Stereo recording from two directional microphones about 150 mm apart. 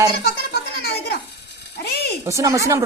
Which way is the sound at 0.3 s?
90° left.